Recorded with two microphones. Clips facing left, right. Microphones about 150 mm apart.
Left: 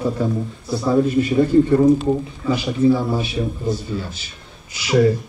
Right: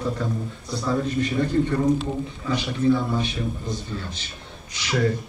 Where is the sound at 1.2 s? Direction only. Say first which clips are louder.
Left 7 dB; 10° left (ahead or behind).